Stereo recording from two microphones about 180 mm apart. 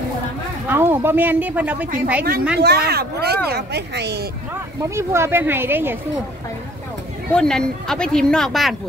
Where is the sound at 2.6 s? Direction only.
65° right (ahead or behind).